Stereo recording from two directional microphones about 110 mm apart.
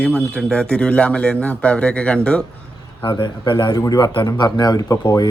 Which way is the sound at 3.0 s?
45° left (ahead or behind).